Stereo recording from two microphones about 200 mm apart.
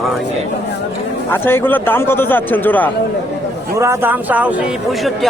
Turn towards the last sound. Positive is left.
turn(degrees=-10)  # may be behind; listen again after turning